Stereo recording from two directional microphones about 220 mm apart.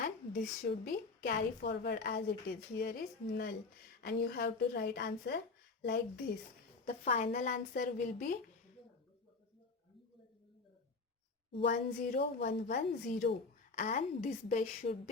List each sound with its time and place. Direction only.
0.0 s a woman's voice: 45° left (ahead or behind)
11.7 s a woman's voice: 35° left (ahead or behind)
12.4 s a woman's voice: 50° left (ahead or behind)
12.6 s a woman's voice: 35° left (ahead or behind)